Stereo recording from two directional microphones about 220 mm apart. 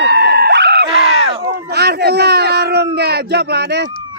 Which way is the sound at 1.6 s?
45° right (ahead or behind).